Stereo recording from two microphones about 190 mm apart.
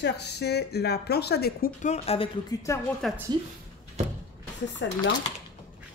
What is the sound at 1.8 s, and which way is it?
Speech, 35° left (ahead or behind).